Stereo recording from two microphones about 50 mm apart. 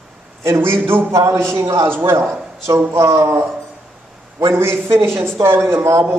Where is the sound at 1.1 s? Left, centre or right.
Right.